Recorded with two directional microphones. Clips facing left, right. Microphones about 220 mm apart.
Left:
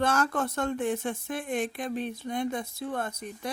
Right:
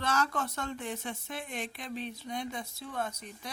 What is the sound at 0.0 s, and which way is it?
Speech, 50° left (ahead or behind).